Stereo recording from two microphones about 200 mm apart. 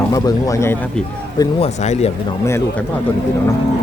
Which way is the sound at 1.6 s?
35° left (ahead or behind).